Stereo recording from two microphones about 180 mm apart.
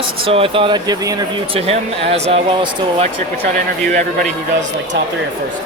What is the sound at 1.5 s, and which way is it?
Speech, 35° right (ahead or behind).